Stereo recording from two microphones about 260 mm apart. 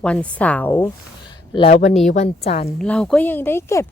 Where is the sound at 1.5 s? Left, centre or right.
Left.